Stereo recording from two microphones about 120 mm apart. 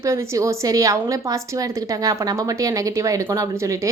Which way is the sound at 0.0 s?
25° right (ahead or behind).